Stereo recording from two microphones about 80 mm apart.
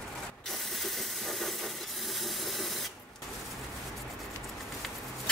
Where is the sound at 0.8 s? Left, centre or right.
Centre.